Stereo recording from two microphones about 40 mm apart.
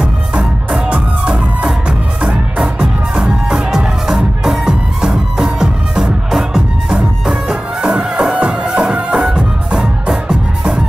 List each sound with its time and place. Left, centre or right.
0.0 s music: right
7.0 s music: right